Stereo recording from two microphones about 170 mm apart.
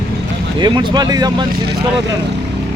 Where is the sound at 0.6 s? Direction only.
25° right (ahead or behind).